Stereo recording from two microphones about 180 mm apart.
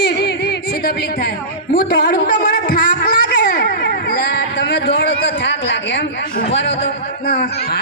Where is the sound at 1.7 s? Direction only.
55° left (ahead or behind).